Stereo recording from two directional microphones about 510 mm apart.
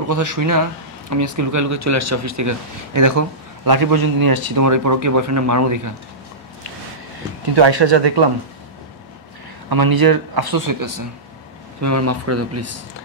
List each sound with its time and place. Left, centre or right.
0.1 s speech: right
7.8 s speech: right
9.7 s speech: right